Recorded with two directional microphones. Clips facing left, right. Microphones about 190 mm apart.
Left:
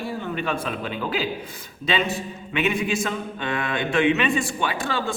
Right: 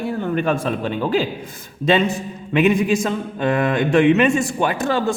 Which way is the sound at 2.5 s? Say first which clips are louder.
Right 7 dB; 40° right (ahead or behind).